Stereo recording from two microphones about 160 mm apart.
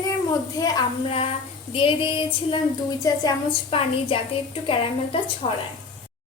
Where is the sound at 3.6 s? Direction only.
35° left (ahead or behind).